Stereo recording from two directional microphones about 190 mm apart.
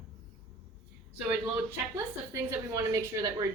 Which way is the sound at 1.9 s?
15° right (ahead or behind).